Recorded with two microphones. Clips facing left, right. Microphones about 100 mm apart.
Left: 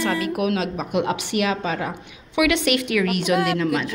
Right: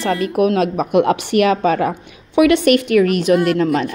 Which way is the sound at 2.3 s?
45° right (ahead or behind).